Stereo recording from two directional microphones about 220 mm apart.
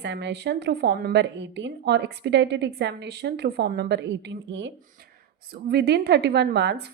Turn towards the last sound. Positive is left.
turn(degrees=-50)  # may be behind; listen again after turning